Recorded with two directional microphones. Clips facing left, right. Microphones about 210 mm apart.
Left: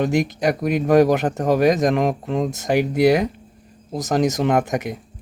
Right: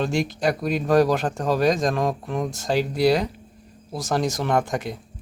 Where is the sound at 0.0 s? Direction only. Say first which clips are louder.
Left 3 dB; 15° left (ahead or behind).